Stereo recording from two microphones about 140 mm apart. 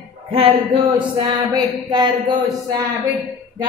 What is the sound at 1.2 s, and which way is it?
A woman's voice, 30° right (ahead or behind).